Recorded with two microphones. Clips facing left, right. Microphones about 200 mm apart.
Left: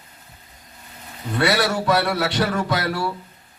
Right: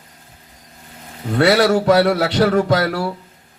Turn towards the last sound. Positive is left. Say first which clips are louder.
# right 6 dB
turn(degrees=-45)  # may be behind; listen again after turning